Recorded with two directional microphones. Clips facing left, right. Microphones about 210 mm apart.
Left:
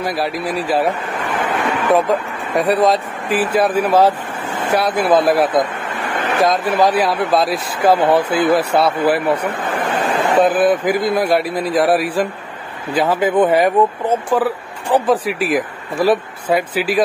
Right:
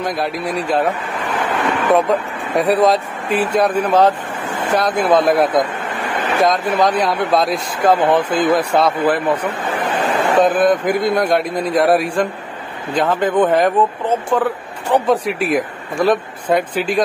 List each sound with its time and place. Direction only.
0.0 s speech: 5° left (ahead or behind)
9.5 s a sound: 50° left (ahead or behind)
10.4 s speech: 5° left (ahead or behind)